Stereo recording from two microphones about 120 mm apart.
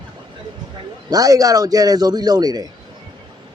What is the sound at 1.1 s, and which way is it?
A man's voice, 30° right (ahead or behind).